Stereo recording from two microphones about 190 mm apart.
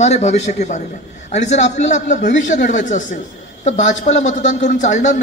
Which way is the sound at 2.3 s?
70° left (ahead or behind).